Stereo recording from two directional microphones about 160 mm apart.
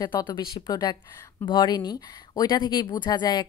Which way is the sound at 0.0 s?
25° left (ahead or behind).